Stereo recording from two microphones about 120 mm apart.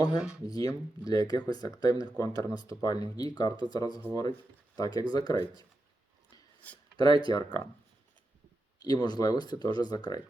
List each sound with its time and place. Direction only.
0.4 s speech: 30° left (ahead or behind)
6.9 s speech: 35° left (ahead or behind)
8.8 s speech: 35° left (ahead or behind)